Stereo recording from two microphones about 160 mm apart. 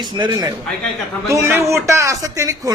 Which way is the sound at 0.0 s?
30° right (ahead or behind).